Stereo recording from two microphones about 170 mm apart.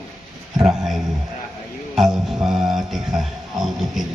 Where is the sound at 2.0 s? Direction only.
Centre (ahead or behind).